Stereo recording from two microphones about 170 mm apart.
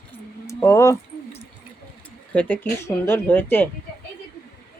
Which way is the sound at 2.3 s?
10° left (ahead or behind).